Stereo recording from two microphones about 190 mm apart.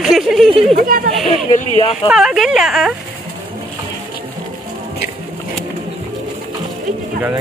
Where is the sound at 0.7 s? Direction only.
50° right (ahead or behind).